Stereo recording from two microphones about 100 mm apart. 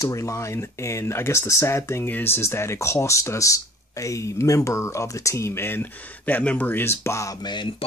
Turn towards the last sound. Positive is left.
turn(degrees=25)  # may be behind; listen again after turning